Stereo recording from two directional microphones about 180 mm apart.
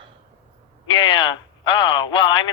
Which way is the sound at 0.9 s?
30° left (ahead or behind).